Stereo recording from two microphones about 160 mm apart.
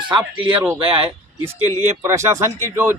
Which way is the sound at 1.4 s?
15° right (ahead or behind).